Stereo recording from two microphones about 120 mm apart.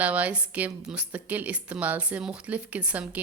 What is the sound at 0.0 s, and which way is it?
Speech, 10° right (ahead or behind).